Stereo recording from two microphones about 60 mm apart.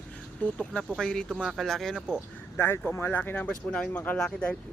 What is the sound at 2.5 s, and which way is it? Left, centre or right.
Speech, left.